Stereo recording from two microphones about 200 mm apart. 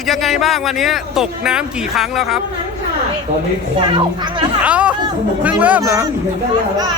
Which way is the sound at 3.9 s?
25° right (ahead or behind).